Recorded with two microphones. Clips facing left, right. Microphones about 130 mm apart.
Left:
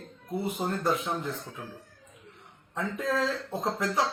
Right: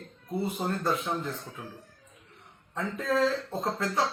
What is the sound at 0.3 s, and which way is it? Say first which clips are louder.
Speech: even; 15° left (ahead or behind).